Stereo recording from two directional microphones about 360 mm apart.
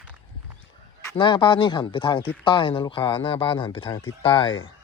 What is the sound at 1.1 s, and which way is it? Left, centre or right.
Speech, centre.